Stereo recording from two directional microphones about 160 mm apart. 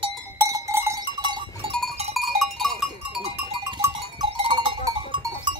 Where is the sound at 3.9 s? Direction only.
35° right (ahead or behind).